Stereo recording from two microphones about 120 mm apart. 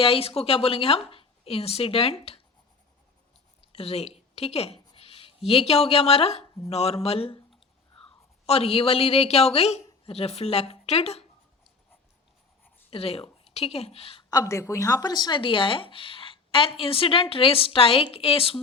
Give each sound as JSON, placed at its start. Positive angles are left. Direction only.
{"t": 0.0, "sound": "speech", "side_deg": 50}
{"t": 3.7, "sound": "a woman's voice", "side_deg": 55}
{"t": 4.9, "sound": "a sound", "side_deg": 50}
{"t": 5.5, "sound": "speech", "side_deg": 55}
{"t": 8.4, "sound": "speech", "side_deg": 55}
{"t": 12.9, "sound": "a woman's voice", "side_deg": 55}
{"t": 14.3, "sound": "speech", "side_deg": 30}